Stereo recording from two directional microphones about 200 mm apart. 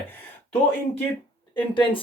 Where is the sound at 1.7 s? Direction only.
25° left (ahead or behind).